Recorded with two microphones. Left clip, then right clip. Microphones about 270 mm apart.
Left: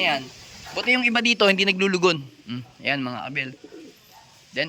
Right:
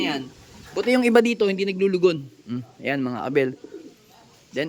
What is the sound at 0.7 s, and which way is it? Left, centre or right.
Speech, right.